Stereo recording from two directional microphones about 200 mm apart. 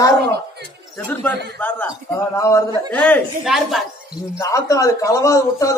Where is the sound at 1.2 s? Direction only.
10° left (ahead or behind).